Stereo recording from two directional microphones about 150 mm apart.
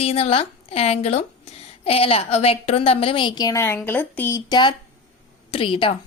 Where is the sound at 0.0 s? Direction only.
40° left (ahead or behind).